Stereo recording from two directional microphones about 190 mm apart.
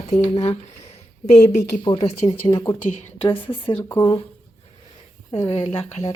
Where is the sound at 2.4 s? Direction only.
15° left (ahead or behind).